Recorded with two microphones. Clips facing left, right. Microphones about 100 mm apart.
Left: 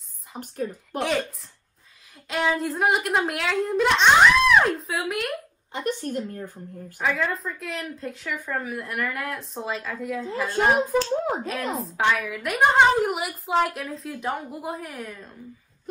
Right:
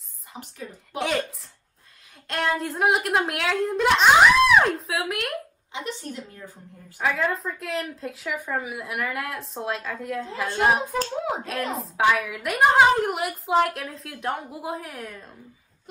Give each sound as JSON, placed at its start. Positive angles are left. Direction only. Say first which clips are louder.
{"t": 0.4, "sound": "a woman's voice", "louder": "left 8 dB", "side_deg": 50}
{"t": 0.9, "sound": "a woman's voice", "louder": "even", "side_deg": 0}
{"t": 2.2, "sound": "a woman's voice", "louder": "left 1 dB", "side_deg": 0}
{"t": 5.7, "sound": "a woman's voice", "louder": "left 6 dB", "side_deg": 50}
{"t": 7.0, "sound": "a woman's voice", "louder": "right 1 dB", "side_deg": 0}